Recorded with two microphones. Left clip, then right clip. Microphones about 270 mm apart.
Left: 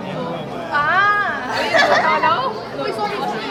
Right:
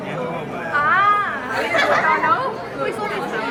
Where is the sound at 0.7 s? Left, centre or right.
Left.